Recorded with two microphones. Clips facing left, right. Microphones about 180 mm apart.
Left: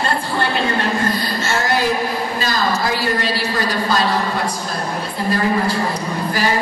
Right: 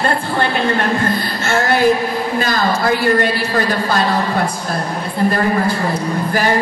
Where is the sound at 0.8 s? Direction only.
55° right (ahead or behind).